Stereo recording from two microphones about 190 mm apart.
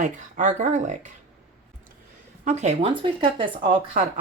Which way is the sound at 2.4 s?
40° right (ahead or behind).